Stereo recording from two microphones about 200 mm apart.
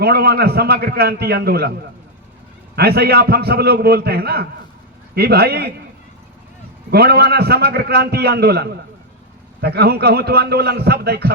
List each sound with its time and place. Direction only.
0.0 s a man's voice: 50° right (ahead or behind)
2.7 s a man's voice: 50° right (ahead or behind)
6.9 s a man's voice: 50° right (ahead or behind)